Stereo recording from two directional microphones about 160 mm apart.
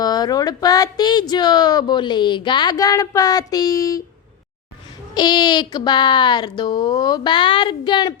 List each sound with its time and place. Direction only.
0.0 s speech: 25° left (ahead or behind)
5.1 s speech: 25° left (ahead or behind)